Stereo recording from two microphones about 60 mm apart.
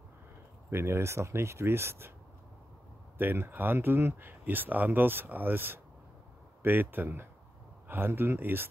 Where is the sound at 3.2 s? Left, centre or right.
Right.